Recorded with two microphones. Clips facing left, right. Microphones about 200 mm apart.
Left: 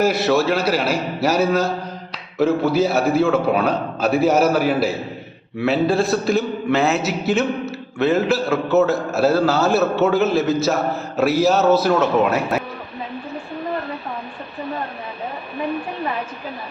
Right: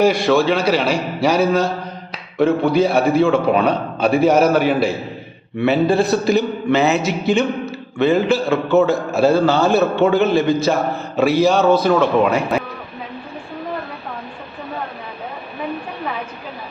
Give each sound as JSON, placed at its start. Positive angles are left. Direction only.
{"t": 0.0, "sound": "a man's voice", "side_deg": 5}